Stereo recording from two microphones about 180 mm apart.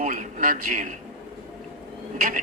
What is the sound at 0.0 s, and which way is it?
Speech, 45° right (ahead or behind).